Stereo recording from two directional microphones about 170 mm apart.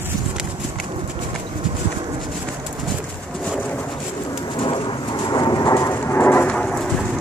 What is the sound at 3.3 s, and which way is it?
Bird, centre (ahead or behind).